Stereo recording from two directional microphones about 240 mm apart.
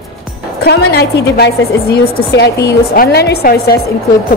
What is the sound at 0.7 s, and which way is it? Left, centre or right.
A woman's voice, left.